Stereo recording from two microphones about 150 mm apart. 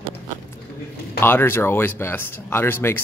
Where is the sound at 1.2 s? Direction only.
15° left (ahead or behind).